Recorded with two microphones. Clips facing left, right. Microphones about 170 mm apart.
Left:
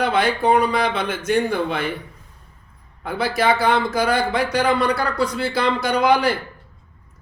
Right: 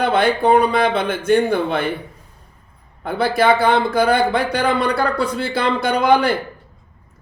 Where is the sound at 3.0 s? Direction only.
55° right (ahead or behind).